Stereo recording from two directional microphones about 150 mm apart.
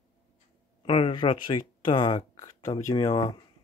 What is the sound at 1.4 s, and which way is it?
Speech, 65° left (ahead or behind).